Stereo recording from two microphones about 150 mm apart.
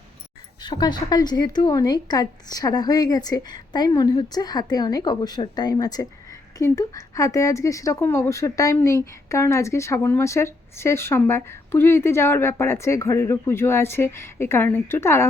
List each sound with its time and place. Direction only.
0.6 s a woman's voice: 30° left (ahead or behind)